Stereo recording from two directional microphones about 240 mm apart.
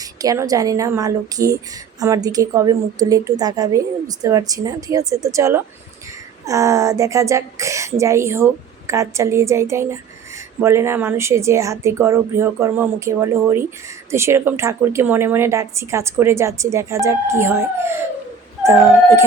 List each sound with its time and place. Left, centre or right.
0.0 s a woman's voice: centre